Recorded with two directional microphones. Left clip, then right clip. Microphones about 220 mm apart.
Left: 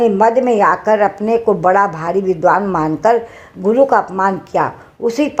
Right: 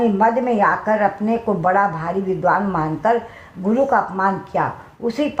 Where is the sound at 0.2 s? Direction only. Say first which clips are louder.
Left 5 dB; 45° left (ahead or behind).